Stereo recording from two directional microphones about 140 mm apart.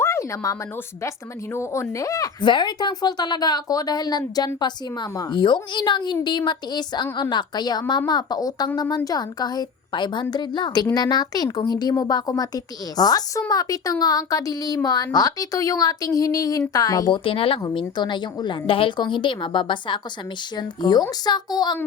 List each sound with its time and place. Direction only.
0.0 s a sound: 20° left (ahead or behind)
1.5 s a woman's voice: 20° left (ahead or behind)
17.2 s a woman's voice: 40° left (ahead or behind)